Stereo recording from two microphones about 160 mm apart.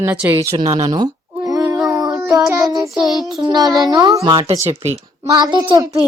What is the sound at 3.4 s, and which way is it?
A child's voice, 25° right (ahead or behind).